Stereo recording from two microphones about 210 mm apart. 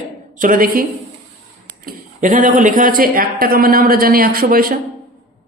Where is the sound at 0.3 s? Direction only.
40° right (ahead or behind).